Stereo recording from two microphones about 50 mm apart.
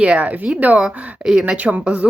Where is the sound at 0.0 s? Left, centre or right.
Centre.